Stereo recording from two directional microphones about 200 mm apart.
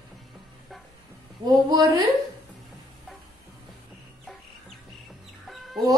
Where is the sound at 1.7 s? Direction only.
20° right (ahead or behind).